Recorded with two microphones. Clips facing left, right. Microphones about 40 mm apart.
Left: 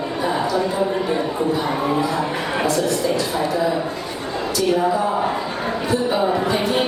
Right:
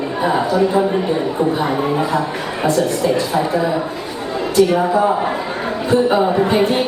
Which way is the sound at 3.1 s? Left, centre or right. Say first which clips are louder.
Right 3 dB; right.